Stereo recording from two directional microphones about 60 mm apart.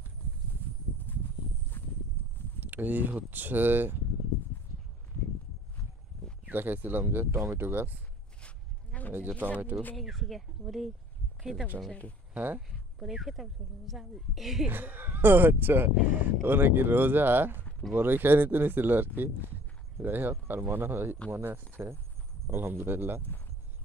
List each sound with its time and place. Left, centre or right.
2.2 s a sound: left
2.6 s speech: right
6.4 s speech: right
8.4 s sheep: left
9.1 s speech: right
9.9 s speech: centre
12.5 s speech: centre
14.7 s speech: right